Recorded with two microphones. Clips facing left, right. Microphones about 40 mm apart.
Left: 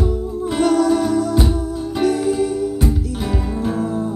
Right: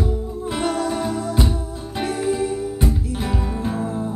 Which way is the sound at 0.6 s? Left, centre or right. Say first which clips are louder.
Left 8 dB; centre.